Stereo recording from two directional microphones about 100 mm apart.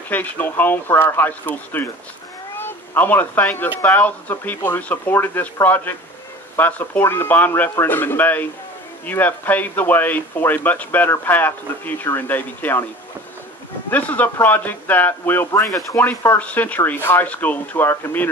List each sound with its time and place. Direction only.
0.1 s speech: 20° left (ahead or behind)
13.8 s speech: 15° left (ahead or behind)
16.3 s speech: 15° left (ahead or behind)